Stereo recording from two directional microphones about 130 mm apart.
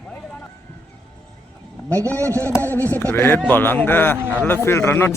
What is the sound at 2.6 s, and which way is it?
Speech, 15° left (ahead or behind).